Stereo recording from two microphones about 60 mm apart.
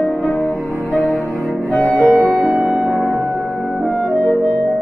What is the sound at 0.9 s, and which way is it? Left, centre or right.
Music, centre.